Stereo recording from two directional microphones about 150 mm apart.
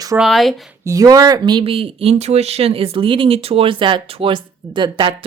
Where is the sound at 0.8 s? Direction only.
20° right (ahead or behind).